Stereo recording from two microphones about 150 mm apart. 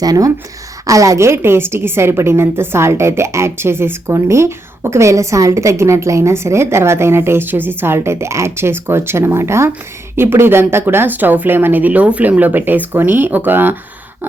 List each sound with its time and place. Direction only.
0.0 s a woman's voice: 25° right (ahead or behind)